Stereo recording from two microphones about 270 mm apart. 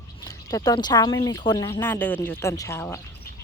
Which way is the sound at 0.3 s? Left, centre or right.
Centre.